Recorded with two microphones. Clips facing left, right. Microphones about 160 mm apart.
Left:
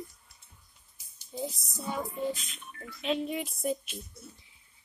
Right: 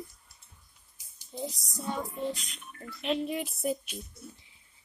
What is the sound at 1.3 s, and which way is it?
Speech, centre (ahead or behind).